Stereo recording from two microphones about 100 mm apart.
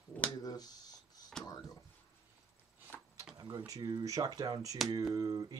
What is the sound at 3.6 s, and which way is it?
Speech, 35° right (ahead or behind).